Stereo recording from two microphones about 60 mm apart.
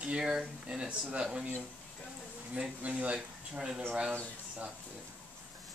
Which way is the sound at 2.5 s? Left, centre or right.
Centre.